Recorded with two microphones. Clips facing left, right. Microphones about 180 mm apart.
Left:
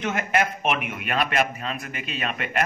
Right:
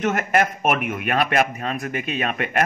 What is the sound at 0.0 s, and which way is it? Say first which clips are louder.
A man's voice: right 4 dB; 45° right (ahead or behind).